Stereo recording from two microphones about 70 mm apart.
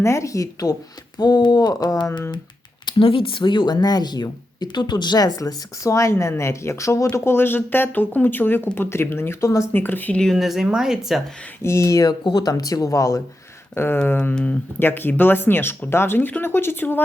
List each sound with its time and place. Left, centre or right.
0.0 s speech: left
1.2 s speech: left
2.9 s a sound: left
3.4 s speech: left
10.3 s speech: centre
11.6 s speech: left
12.0 s speech: left
13.7 s speech: left
14.3 s speech: centre
14.8 s speech: left